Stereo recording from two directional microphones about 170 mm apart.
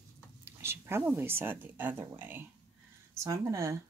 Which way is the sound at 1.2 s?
15° right (ahead or behind).